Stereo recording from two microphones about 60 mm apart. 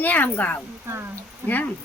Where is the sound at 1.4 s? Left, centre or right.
Left.